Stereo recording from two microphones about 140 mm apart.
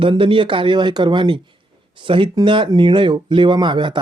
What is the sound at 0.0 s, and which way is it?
Speech, 35° right (ahead or behind).